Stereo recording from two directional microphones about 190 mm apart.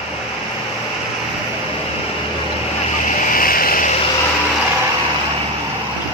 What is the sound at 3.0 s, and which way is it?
Vehicle, 45° left (ahead or behind).